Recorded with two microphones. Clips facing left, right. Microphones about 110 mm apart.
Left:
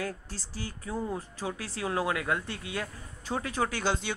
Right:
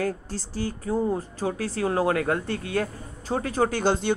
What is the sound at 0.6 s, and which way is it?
Speech, 45° right (ahead or behind).